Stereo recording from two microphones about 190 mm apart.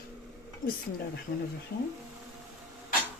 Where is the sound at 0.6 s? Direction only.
45° left (ahead or behind).